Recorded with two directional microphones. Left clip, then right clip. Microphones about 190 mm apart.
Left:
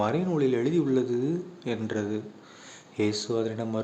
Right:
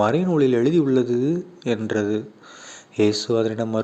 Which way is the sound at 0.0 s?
35° right (ahead or behind).